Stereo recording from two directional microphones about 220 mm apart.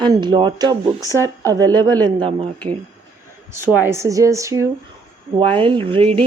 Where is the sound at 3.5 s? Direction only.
10° right (ahead or behind).